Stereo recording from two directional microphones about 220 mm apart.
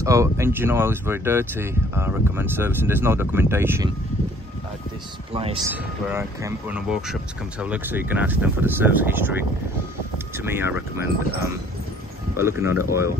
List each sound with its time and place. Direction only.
0.0 s speech: 15° right (ahead or behind)
5.3 s speech: 25° right (ahead or behind)
5.7 s speech: 10° right (ahead or behind)
12.4 s speech: 10° right (ahead or behind)